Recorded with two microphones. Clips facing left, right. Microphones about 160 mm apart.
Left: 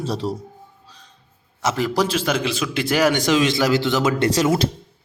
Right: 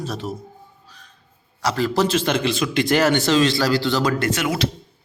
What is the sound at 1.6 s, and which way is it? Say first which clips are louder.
A man's voice: right 1 dB; 20° left (ahead or behind).